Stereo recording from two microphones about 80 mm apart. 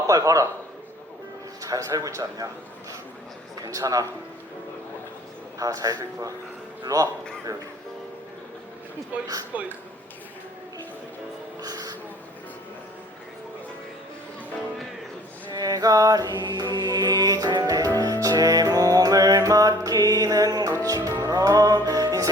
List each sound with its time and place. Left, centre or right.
0.1 s a man's voice: right
1.6 s a man's voice: right
3.6 s a man's voice: right
5.5 s a man's voice: right
11.6 s music: right
15.5 s mantra: right
20.8 s music: right